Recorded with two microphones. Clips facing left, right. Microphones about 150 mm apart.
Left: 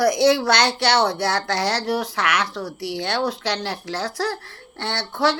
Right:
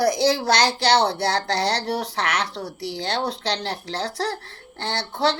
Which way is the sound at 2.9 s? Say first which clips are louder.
Left 2 dB; 65° left (ahead or behind).